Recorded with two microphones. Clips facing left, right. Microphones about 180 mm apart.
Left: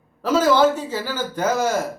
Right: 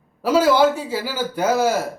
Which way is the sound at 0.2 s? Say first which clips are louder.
Right 1 dB; 10° right (ahead or behind).